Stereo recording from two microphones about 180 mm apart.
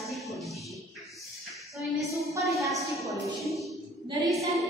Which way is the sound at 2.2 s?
15° right (ahead or behind).